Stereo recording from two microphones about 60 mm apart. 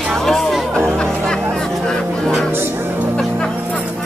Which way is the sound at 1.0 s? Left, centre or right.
Centre.